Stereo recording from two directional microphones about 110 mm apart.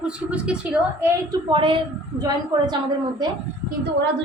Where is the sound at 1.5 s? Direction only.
50° right (ahead or behind).